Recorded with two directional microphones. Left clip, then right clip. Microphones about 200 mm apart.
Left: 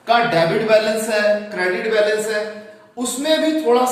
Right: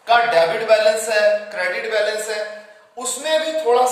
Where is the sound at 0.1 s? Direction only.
10° right (ahead or behind); by 2.0 s 30° right (ahead or behind).